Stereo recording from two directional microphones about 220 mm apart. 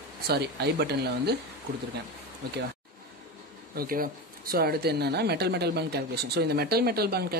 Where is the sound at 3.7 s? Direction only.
40° right (ahead or behind).